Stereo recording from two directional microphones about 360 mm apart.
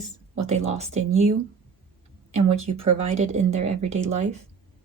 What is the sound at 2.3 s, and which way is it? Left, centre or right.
Speech, centre.